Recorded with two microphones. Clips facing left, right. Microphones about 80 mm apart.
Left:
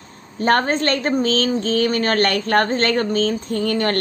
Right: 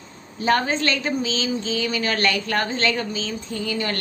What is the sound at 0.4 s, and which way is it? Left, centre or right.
A woman's voice, left.